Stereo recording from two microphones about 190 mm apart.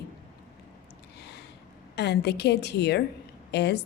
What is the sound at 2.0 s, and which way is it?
A woman's voice, 60° left (ahead or behind).